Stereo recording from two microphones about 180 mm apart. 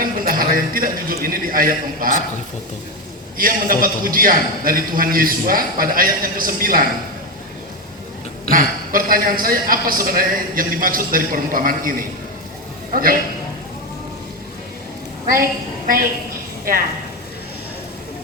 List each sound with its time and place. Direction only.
0.0 s a man's voice: 50° right (ahead or behind)
3.3 s a man's voice: 50° right (ahead or behind)
8.4 s a man's voice: 50° right (ahead or behind)